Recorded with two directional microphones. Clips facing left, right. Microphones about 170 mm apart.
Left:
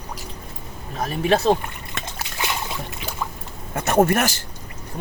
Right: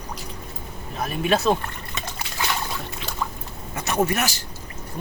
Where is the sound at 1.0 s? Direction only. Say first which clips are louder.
Left 2 dB; 35° left (ahead or behind).